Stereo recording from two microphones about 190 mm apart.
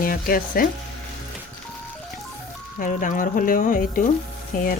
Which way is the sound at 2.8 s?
45° left (ahead or behind).